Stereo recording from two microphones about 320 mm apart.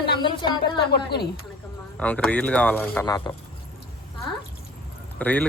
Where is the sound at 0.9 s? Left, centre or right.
Left.